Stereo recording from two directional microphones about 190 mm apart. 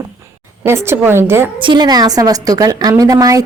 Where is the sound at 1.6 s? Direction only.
25° right (ahead or behind).